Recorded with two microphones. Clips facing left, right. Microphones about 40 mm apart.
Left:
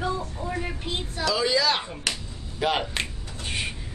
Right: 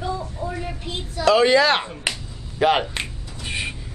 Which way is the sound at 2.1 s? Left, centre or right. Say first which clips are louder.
Right 2 dB; right.